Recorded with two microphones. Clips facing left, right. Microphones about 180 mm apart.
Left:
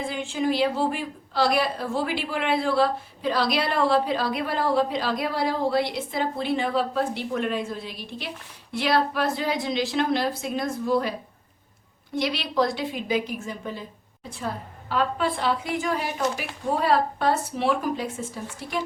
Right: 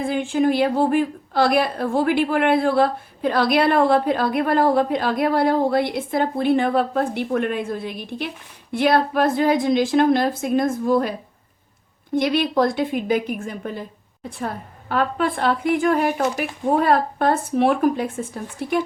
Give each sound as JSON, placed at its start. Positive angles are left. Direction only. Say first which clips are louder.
{"t": 0.0, "sound": "a woman's voice", "louder": "right 7 dB", "side_deg": -55}
{"t": 12.1, "sound": "a woman's voice", "louder": "right 6 dB", "side_deg": -50}